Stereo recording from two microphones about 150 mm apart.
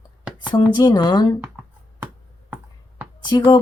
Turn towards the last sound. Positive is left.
turn(degrees=30)  # may be behind; listen again after turning